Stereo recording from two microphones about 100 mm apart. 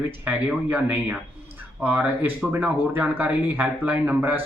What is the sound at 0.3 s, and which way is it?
Speech, 15° right (ahead or behind).